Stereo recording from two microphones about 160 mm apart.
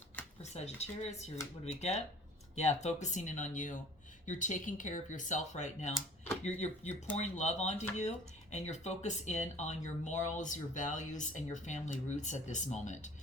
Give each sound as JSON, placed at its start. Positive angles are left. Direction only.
{"t": 0.5, "sound": "speech", "side_deg": 45}